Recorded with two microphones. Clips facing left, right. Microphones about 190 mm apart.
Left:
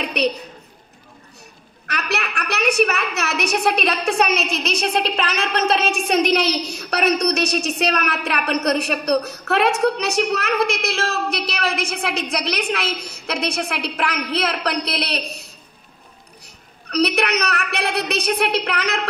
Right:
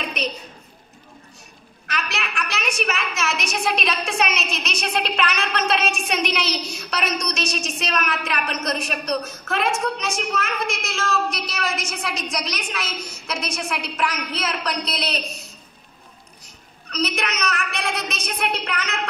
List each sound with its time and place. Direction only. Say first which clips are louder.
0.0 s a sound: left 7 dB; 70° left (ahead or behind)
1.9 s a woman's voice: left 4 dB; 65° left (ahead or behind)
4.2 s a woman's voice: left 5 dB; 35° left (ahead or behind)
6.9 s a woman's voice: left 8 dB; 60° left (ahead or behind)
16.9 s a woman's voice: left 7 dB; 65° left (ahead or behind)